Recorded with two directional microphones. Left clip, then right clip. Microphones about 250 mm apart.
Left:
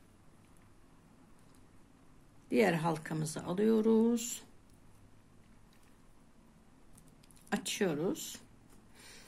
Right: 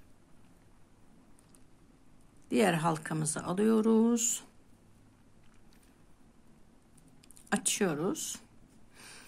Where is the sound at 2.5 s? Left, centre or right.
Centre.